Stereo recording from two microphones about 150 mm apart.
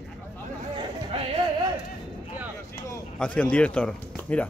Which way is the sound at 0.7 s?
35° right (ahead or behind).